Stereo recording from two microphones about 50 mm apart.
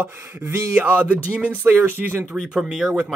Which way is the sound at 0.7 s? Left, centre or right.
Right.